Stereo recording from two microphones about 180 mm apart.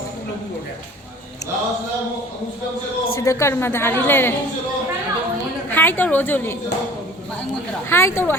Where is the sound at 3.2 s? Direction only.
15° left (ahead or behind).